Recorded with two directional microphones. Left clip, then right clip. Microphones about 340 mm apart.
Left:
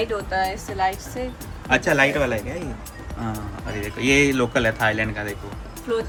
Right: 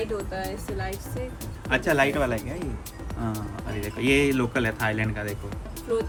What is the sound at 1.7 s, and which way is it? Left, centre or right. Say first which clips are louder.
Speech: left 4 dB; centre.